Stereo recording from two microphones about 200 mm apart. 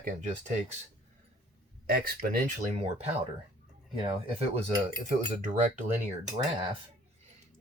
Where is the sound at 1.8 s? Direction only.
50° right (ahead or behind).